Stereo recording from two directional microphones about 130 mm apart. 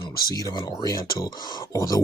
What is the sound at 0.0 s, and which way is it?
Speech, 30° left (ahead or behind).